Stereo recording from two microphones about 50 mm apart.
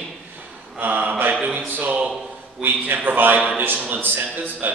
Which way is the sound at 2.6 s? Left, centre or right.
Right.